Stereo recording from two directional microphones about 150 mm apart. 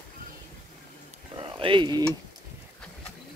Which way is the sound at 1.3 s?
35° right (ahead or behind).